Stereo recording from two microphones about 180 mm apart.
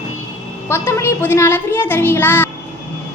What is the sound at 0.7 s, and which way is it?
A child's voice, 15° left (ahead or behind).